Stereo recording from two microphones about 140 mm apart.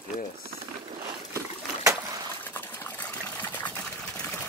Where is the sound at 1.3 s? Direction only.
20° right (ahead or behind).